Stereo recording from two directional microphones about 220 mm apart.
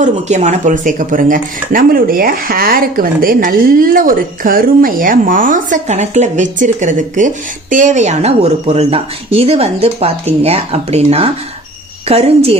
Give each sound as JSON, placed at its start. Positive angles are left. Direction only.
{"t": 0.0, "sound": "speech", "side_deg": -30}